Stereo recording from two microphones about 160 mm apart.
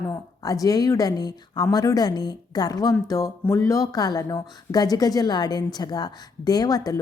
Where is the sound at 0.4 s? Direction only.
20° left (ahead or behind).